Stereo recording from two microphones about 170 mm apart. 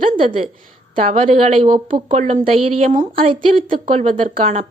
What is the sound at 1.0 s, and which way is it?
A woman's voice, 35° right (ahead or behind).